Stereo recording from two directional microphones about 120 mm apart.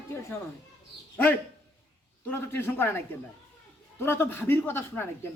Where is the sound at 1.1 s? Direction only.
15° left (ahead or behind).